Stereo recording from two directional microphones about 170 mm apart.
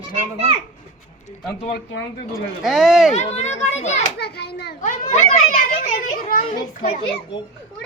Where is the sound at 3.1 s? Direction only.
40° left (ahead or behind).